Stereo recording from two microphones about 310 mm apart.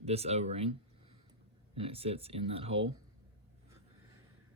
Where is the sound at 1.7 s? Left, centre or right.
Centre.